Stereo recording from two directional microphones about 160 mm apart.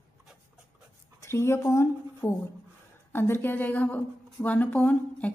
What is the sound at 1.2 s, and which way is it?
Speech, 15° left (ahead or behind).